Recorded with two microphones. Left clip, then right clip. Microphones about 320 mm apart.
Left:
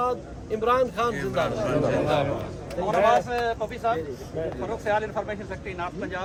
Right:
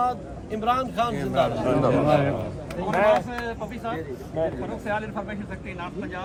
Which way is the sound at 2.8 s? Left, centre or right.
Left.